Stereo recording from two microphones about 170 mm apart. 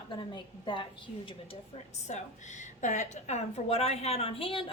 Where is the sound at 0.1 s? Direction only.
30° left (ahead or behind).